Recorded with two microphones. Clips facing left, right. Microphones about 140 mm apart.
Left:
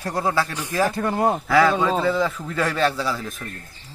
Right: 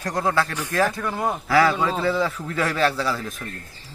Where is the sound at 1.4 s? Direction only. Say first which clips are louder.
Right 1 dB; centre (ahead or behind).